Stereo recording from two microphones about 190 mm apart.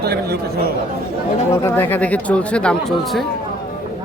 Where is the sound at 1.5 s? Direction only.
15° left (ahead or behind).